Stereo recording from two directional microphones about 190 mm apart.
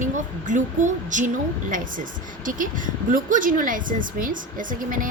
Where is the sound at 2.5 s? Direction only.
45° right (ahead or behind).